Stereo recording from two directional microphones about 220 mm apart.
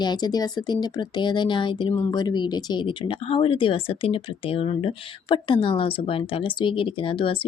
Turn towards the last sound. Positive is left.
turn(degrees=25)  # may be behind; listen again after turning